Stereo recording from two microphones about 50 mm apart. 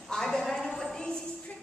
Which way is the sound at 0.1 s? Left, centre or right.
Centre.